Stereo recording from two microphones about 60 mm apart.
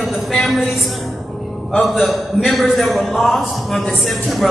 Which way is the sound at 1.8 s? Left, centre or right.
Centre.